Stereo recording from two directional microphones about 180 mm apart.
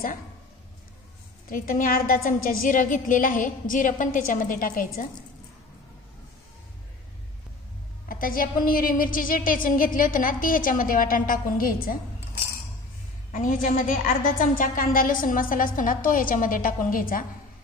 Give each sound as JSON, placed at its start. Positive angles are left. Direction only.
{"t": 1.5, "sound": "a woman's voice", "side_deg": 50}
{"t": 8.1, "sound": "a woman's voice", "side_deg": 50}
{"t": 13.3, "sound": "a woman's voice", "side_deg": 50}